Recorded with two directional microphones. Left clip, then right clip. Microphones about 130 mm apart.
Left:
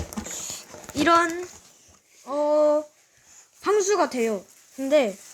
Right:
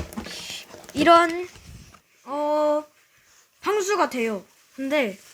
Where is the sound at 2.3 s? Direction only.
15° right (ahead or behind).